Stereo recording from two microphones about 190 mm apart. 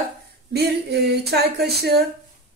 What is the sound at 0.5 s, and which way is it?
Speech, 60° right (ahead or behind).